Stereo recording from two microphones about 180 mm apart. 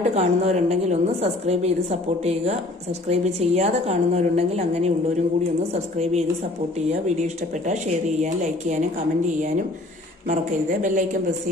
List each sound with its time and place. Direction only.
0.1 s a woman's voice: 40° right (ahead or behind)